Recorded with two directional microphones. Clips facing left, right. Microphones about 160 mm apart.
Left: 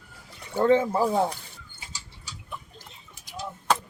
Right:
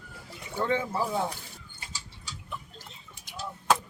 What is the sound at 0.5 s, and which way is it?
Speech, 45° left (ahead or behind).